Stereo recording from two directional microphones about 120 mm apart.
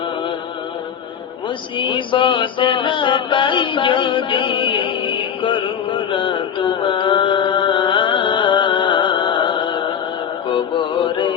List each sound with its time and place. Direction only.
1.8 s music: 45° left (ahead or behind)